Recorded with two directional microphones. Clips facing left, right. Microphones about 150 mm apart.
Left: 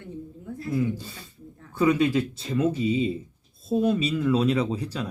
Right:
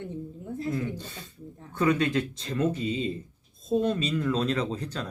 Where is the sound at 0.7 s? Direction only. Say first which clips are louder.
Left 7 dB; 5° left (ahead or behind).